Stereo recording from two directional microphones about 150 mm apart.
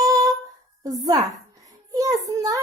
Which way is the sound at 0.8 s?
25° right (ahead or behind).